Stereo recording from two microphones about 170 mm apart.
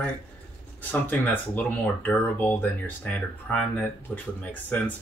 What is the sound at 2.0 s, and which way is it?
Speech, 10° left (ahead or behind).